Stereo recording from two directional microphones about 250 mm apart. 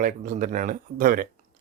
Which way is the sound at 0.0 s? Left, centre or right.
Right.